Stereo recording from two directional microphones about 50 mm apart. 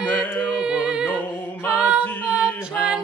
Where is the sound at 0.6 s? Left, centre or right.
Right.